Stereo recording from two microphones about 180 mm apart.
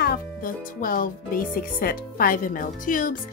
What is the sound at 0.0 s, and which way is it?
Speech, 55° left (ahead or behind).